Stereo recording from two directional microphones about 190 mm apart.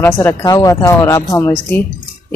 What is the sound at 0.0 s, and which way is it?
Speech, 10° left (ahead or behind).